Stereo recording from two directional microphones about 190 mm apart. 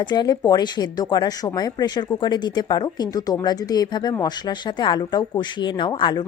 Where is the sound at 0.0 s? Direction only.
20° left (ahead or behind).